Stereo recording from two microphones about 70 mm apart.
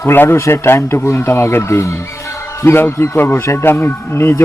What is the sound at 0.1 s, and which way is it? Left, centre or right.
Speech, left.